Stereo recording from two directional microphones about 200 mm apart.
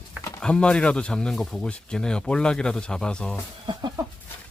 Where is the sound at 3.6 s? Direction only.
20° right (ahead or behind).